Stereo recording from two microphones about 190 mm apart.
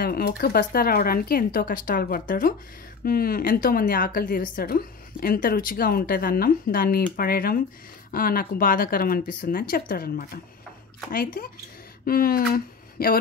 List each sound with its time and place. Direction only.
0.0 s a woman's voice: 50° left (ahead or behind)
12.1 s speech: 50° left (ahead or behind)